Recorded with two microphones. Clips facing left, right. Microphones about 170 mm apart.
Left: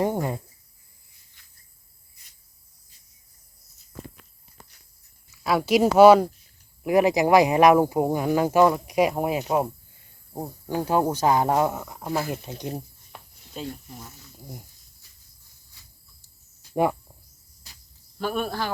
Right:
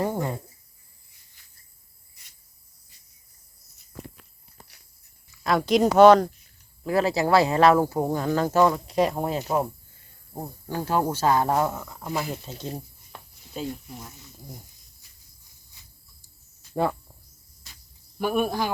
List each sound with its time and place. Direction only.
0.0 s a sound: 15° left (ahead or behind)
2.2 s cricket: 80° right
5.3 s speech: 5° left (ahead or behind)
13.5 s speech: 5° right (ahead or behind)
18.2 s speech: 15° right (ahead or behind)